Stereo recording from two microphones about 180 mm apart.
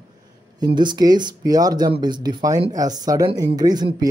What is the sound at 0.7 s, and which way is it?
Speech, 25° right (ahead or behind).